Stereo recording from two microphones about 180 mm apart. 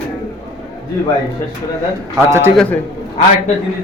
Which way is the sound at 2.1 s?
15° right (ahead or behind).